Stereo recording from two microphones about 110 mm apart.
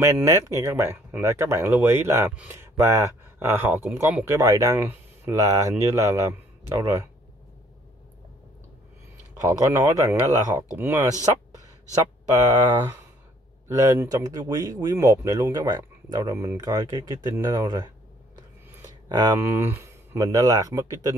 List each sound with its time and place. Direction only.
0.0 s speech: 30° right (ahead or behind)
5.4 s speech: 35° right (ahead or behind)
9.4 s speech: 30° right (ahead or behind)
13.7 s speech: 30° right (ahead or behind)
18.3 s a sound: 35° right (ahead or behind)
19.3 s speech: 20° right (ahead or behind)